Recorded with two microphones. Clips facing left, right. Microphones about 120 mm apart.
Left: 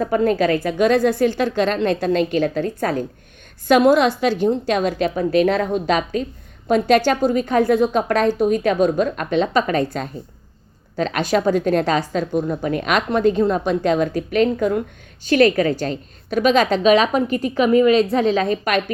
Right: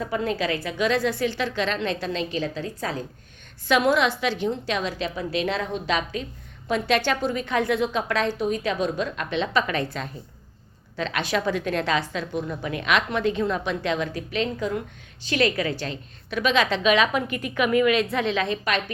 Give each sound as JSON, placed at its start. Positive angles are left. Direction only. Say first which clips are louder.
{"t": 0.0, "sound": "a woman's voice", "louder": "left 8 dB", "side_deg": 50}
{"t": 3.7, "sound": "a woman's voice", "louder": "left 7 dB", "side_deg": 45}